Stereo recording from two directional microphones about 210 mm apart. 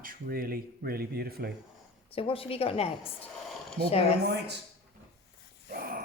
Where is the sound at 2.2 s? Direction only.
25° left (ahead or behind).